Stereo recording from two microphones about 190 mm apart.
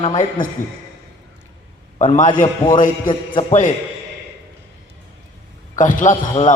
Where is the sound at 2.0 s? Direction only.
40° left (ahead or behind).